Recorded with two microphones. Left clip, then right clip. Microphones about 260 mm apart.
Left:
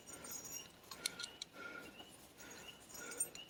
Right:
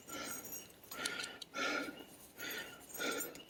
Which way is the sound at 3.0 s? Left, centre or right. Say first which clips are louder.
Right 13 dB; right.